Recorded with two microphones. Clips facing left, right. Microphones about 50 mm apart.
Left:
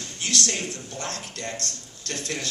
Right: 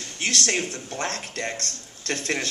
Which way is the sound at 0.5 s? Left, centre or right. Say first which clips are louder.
Right 4 dB; right.